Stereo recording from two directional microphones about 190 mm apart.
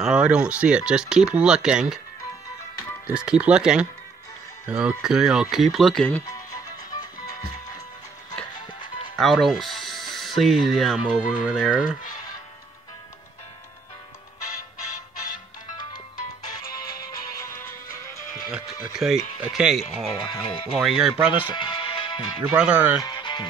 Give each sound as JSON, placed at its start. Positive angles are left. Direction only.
{"t": 0.0, "sound": "speech", "side_deg": -5}
{"t": 3.1, "sound": "speech", "side_deg": -5}
{"t": 8.5, "sound": "music", "side_deg": 25}
{"t": 9.2, "sound": "speech", "side_deg": 0}
{"t": 17.2, "sound": "music", "side_deg": 15}
{"t": 18.5, "sound": "speech", "side_deg": -5}
{"t": 20.4, "sound": "speech", "side_deg": 25}
{"t": 20.7, "sound": "speech", "side_deg": -5}
{"t": 21.5, "sound": "music", "side_deg": 25}
{"t": 22.6, "sound": "speech", "side_deg": -5}
{"t": 22.9, "sound": "speech", "side_deg": 20}